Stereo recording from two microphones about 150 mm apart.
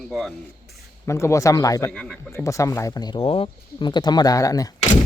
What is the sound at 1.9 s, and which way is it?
Speech, 5° left (ahead or behind).